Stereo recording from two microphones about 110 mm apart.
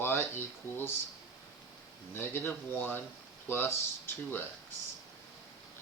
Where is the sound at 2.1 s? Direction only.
20° left (ahead or behind).